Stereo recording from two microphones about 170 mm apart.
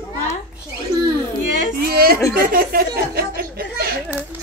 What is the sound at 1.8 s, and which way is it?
A woman's voice, 60° right (ahead or behind).